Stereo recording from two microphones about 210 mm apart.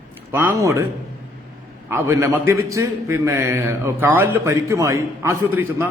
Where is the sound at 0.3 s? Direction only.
10° right (ahead or behind).